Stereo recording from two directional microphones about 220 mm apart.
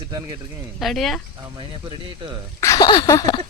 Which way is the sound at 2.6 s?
15° left (ahead or behind).